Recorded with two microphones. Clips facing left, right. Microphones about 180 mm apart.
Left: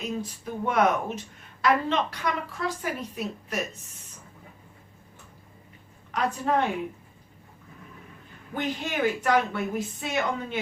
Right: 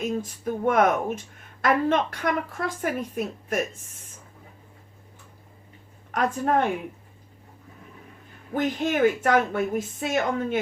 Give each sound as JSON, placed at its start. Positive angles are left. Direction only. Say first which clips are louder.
{"t": 0.0, "sound": "a woman's voice", "louder": "right 5 dB", "side_deg": -45}
{"t": 6.1, "sound": "a woman's voice", "louder": "right 2 dB", "side_deg": -50}
{"t": 8.5, "sound": "a woman's voice", "louder": "right 5 dB", "side_deg": -50}